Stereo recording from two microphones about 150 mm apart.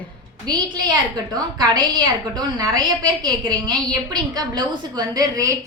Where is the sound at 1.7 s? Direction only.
25° right (ahead or behind).